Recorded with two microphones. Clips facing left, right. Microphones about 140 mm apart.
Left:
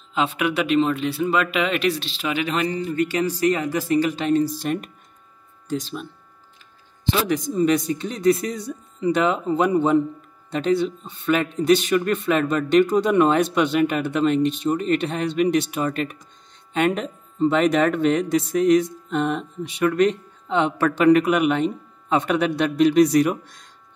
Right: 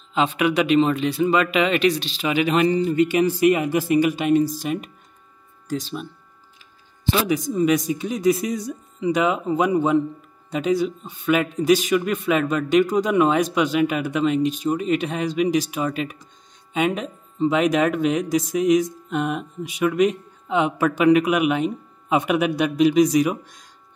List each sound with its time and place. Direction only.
0.1 s a man's voice: centre (ahead or behind)
2.7 s speech: 20° right (ahead or behind)
4.6 s a man's voice: 5° right (ahead or behind)
7.2 s a man's voice: 5° right (ahead or behind)